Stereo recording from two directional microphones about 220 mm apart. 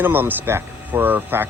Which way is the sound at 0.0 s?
10° right (ahead or behind).